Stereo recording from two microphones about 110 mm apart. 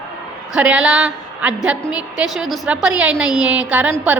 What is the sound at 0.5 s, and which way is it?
A woman's voice, 10° right (ahead or behind).